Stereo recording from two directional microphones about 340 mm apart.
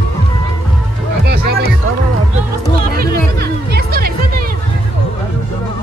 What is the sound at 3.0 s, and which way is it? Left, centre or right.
Music, right.